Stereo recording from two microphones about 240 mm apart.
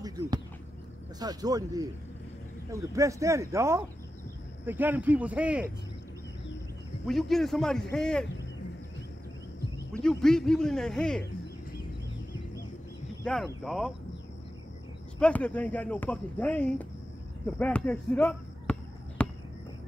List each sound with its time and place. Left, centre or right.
0.0 s speech: centre
7.1 s speech: centre
9.9 s speech: centre
13.2 s speech: centre
15.1 s speech: centre
17.6 s basketball bounce: centre